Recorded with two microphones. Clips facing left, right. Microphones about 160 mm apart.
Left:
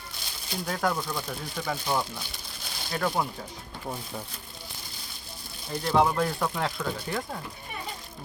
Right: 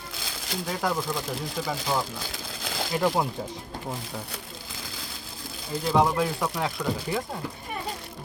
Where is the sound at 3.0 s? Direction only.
20° right (ahead or behind).